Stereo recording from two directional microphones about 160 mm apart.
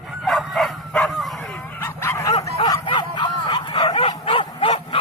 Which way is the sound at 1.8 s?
15° left (ahead or behind).